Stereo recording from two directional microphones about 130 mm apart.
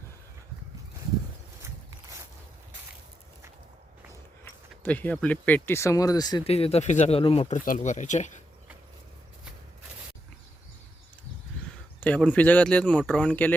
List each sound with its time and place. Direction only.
4.1 s speech: 20° left (ahead or behind)
6.4 s speech: 50° left (ahead or behind)
7.5 s speech: 80° left
11.9 s speech: 10° left (ahead or behind)